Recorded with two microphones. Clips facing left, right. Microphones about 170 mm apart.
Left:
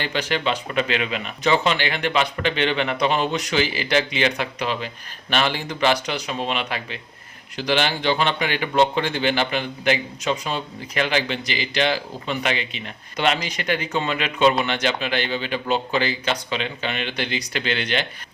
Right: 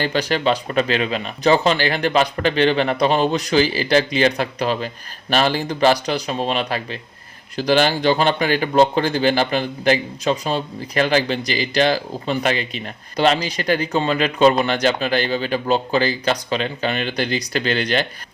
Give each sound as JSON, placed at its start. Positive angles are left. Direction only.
{"t": 0.0, "sound": "speech", "side_deg": -40}